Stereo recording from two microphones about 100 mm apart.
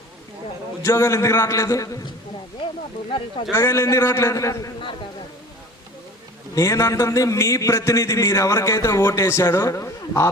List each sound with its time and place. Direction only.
0.8 s a man's voice: 30° left (ahead or behind)
3.1 s speech: 55° left (ahead or behind)
3.5 s a man's voice: 25° left (ahead or behind)
6.5 s a man's voice: 30° left (ahead or behind)